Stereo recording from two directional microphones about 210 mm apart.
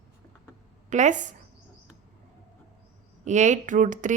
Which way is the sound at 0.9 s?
35° right (ahead or behind).